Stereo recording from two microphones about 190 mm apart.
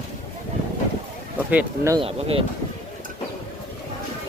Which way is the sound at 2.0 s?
30° right (ahead or behind).